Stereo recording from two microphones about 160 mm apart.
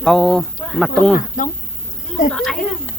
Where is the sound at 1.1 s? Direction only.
55° left (ahead or behind).